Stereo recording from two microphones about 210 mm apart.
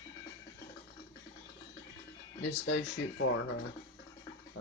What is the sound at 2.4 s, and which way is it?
Speech, 60° left (ahead or behind).